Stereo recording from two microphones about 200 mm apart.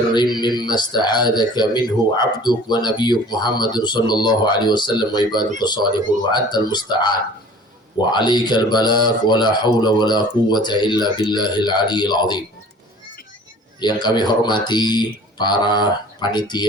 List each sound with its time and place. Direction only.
0.1 s speech: 20° left (ahead or behind)
13.7 s speech: 20° left (ahead or behind)